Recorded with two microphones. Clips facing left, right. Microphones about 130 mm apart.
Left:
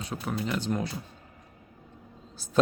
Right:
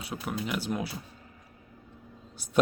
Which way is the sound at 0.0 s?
10° right (ahead or behind).